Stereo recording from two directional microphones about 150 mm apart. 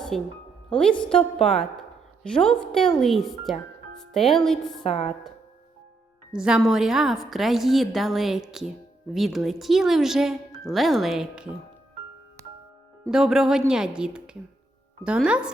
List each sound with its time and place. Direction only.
0.1 s a woman's voice: centre (ahead or behind)
2.3 s a woman's voice: 5° left (ahead or behind)
4.9 s speech: 45° left (ahead or behind)
6.3 s a woman's voice: 5° right (ahead or behind)
13.1 s a woman's voice: 5° right (ahead or behind)